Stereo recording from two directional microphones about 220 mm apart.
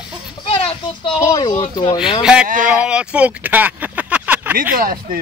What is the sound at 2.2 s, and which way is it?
Speech, 5° right (ahead or behind).